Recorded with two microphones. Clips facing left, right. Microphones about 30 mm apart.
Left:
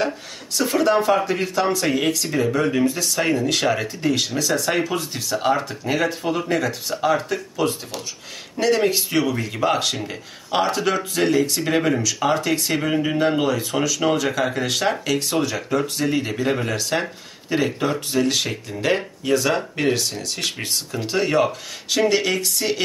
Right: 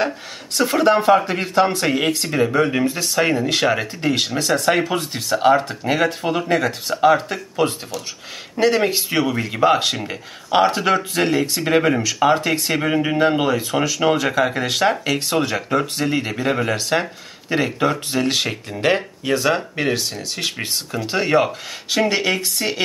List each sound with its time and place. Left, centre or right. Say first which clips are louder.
0.6 s speech: right 2 dB; right
8.5 s speech: right 2 dB; right
18.9 s speech: even; right